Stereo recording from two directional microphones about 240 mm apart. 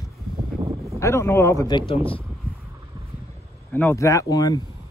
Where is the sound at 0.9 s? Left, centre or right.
Centre.